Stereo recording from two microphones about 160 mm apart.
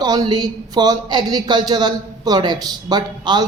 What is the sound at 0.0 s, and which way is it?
Speech, 25° right (ahead or behind).